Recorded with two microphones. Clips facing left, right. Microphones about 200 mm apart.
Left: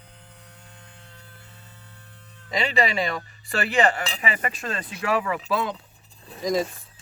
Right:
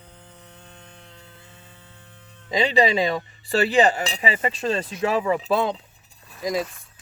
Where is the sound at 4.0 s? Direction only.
25° right (ahead or behind).